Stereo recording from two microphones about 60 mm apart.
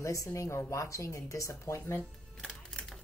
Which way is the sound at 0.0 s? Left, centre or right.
Left.